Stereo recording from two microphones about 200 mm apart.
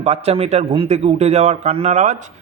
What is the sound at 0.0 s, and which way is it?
A man's voice, 30° right (ahead or behind).